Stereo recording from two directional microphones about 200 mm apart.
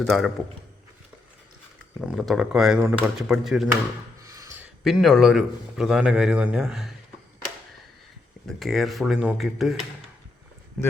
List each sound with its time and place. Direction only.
0.0 s a man's voice: centre (ahead or behind)
2.0 s a man's voice: centre (ahead or behind)
4.2 s a sound: 15° right (ahead or behind)
4.8 s a man's voice: centre (ahead or behind)
8.4 s a man's voice: centre (ahead or behind)
10.8 s speech: centre (ahead or behind)